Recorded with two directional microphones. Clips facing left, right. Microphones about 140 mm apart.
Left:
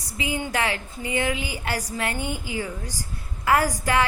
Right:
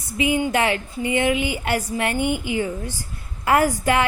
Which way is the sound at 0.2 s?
15° right (ahead or behind).